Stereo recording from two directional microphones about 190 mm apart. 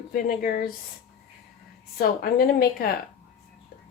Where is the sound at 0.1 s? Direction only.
50° left (ahead or behind).